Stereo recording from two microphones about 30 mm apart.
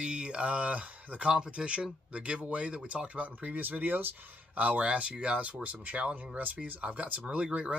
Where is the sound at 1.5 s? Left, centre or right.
Right.